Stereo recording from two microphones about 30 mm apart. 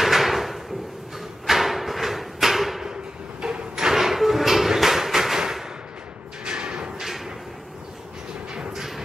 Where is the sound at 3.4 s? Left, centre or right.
Right.